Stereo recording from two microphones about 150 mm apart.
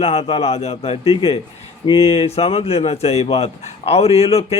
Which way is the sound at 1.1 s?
35° left (ahead or behind).